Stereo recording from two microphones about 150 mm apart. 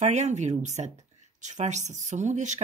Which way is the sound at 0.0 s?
50° right (ahead or behind).